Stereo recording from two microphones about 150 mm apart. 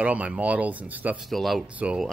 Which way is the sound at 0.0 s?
10° right (ahead or behind).